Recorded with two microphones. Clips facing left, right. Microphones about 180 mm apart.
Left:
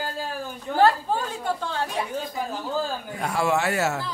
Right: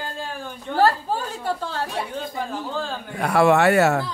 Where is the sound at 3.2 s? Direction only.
65° right (ahead or behind).